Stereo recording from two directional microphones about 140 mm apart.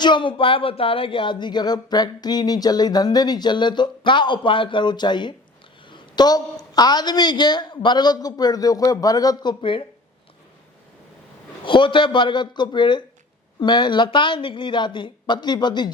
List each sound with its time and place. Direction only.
0.0 s a woman's voice: 35° left (ahead or behind)
11.6 s speech: 35° left (ahead or behind)